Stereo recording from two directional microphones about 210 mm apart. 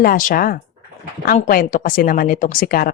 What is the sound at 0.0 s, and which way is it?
Speech, 40° left (ahead or behind).